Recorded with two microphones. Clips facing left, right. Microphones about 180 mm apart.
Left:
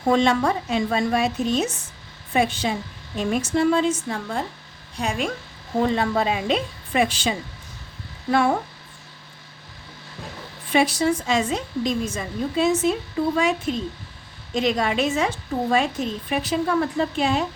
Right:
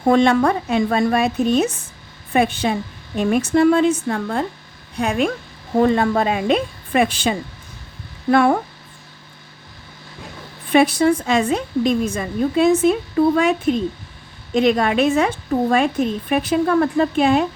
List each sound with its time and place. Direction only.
0.0 s a woman's voice: 55° right (ahead or behind)
10.7 s a woman's voice: 55° right (ahead or behind)